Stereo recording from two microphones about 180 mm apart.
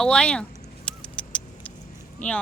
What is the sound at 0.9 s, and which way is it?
Vehicle, 5° left (ahead or behind).